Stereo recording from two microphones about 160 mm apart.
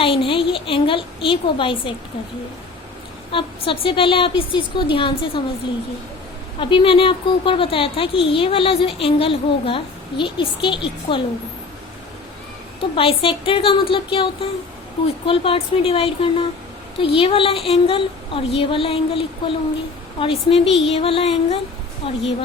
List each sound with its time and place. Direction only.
0.0 s a woman's voice: 35° left (ahead or behind)
3.3 s speech: 35° left (ahead or behind)
6.6 s speech: 30° left (ahead or behind)
13.0 s speech: 35° left (ahead or behind)
15.3 s speech: 35° left (ahead or behind)